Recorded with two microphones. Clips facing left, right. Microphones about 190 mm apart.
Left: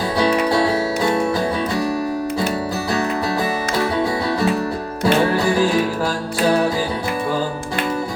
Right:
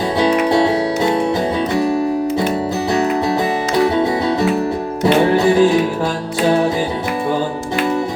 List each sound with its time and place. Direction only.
0.2 s music: 25° right (ahead or behind)
3.8 s music: 20° right (ahead or behind)